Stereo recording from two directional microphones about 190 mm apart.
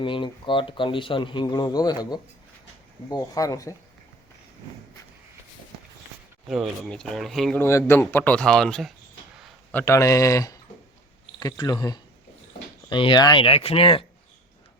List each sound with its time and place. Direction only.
0.0 s speech: 25° left (ahead or behind)
6.5 s speech: centre (ahead or behind)
7.6 s speech: 15° left (ahead or behind)
9.7 s speech: 15° left (ahead or behind)